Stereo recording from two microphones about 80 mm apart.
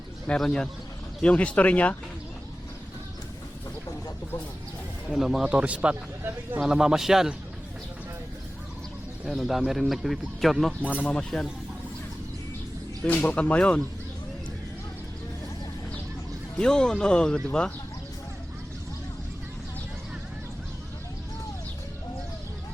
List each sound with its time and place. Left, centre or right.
0.3 s speech: centre
5.1 s speech: centre; by 6.7 s right
6.7 s speech: centre
9.2 s speech: centre
13.1 s speech: centre
16.6 s speech: centre